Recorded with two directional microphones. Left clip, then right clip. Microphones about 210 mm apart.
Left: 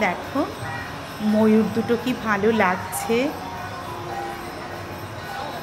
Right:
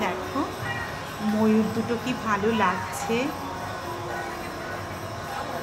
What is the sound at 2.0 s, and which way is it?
A woman's voice, 25° left (ahead or behind).